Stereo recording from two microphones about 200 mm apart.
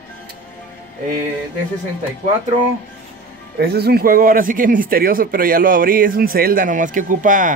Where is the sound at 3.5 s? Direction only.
55° right (ahead or behind).